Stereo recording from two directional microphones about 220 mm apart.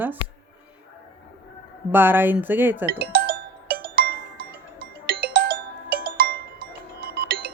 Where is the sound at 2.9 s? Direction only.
45° right (ahead or behind).